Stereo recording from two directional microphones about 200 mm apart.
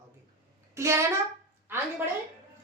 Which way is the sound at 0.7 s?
15° right (ahead or behind).